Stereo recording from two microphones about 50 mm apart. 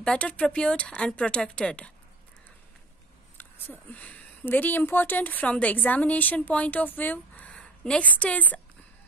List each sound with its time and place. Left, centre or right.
0.0 s speech: left
3.5 s speech: left
4.0 s a sound: left
4.5 s a woman's voice: left
7.5 s a sound: centre
8.0 s a woman's voice: left